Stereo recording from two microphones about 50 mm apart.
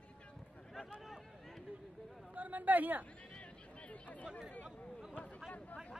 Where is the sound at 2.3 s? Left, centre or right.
Right.